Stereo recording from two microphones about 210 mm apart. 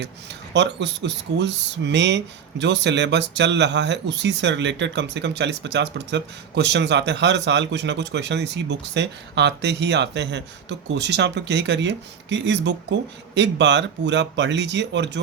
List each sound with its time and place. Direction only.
0.5 s speech: 55° right (ahead or behind)